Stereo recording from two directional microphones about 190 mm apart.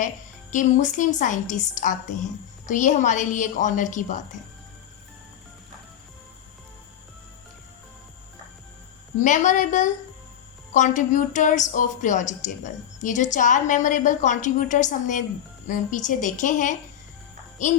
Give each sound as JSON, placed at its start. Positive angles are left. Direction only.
{"t": 0.5, "sound": "a woman's voice", "side_deg": 40}
{"t": 9.2, "sound": "a woman's voice", "side_deg": 40}